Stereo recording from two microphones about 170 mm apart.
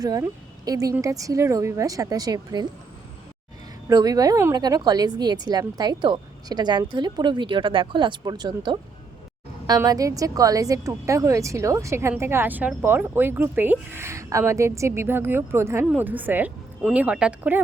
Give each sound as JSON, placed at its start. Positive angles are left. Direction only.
{"t": 0.0, "sound": "speech", "side_deg": -20}
{"t": 3.8, "sound": "a woman's voice", "side_deg": -20}